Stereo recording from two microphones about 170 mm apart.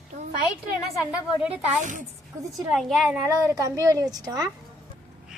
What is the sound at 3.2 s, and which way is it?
Speech, 20° right (ahead or behind).